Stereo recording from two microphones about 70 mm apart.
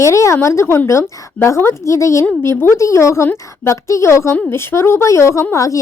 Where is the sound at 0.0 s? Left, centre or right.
Left.